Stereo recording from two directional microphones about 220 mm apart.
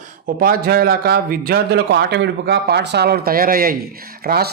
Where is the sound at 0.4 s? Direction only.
45° right (ahead or behind).